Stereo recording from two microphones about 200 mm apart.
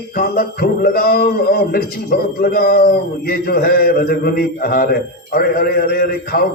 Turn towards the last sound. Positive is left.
turn(degrees=50)  # may be behind; listen again after turning